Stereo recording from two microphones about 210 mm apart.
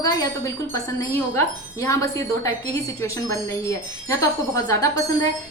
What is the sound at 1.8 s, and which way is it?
Speech, 15° left (ahead or behind).